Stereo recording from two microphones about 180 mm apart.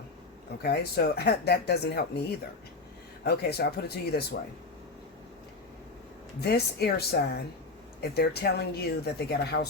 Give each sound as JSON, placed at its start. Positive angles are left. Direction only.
{"t": 0.6, "sound": "speech", "side_deg": 65}
{"t": 3.2, "sound": "speech", "side_deg": 60}
{"t": 6.4, "sound": "speech", "side_deg": 60}